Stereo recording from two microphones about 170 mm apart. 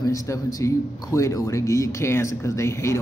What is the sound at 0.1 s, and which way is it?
Speech, 20° left (ahead or behind).